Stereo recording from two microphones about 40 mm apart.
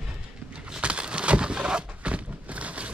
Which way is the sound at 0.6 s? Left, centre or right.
Right.